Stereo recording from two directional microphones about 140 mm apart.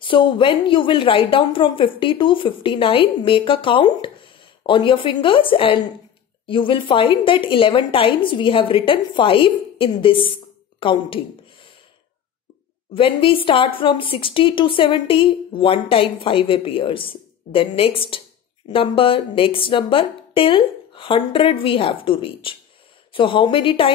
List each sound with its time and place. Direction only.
0.0 s a woman's voice: 40° left (ahead or behind)
12.9 s a woman's voice: 40° left (ahead or behind)